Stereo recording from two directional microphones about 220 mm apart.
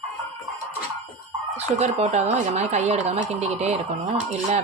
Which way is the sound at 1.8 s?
30° right (ahead or behind).